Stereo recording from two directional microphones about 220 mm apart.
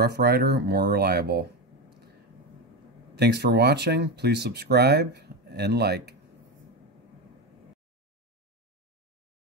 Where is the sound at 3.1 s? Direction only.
50° right (ahead or behind).